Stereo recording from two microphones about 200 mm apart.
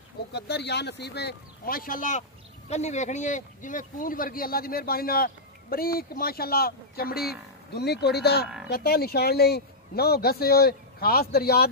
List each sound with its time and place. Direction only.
0.3 s speech: 55° left (ahead or behind)